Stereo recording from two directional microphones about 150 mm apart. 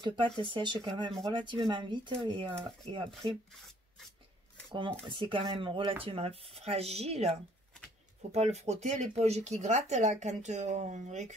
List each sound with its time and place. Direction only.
0.0 s speech: 35° right (ahead or behind)
5.1 s speech: 35° right (ahead or behind); by 11.3 s 50° right (ahead or behind)